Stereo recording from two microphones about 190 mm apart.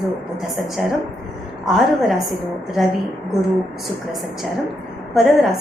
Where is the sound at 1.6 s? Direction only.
Centre (ahead or behind).